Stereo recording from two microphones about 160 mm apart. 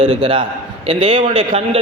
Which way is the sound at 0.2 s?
30° right (ahead or behind).